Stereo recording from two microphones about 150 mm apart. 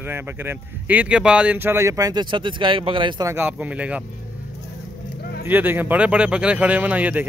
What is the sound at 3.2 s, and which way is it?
Speech, 10° right (ahead or behind).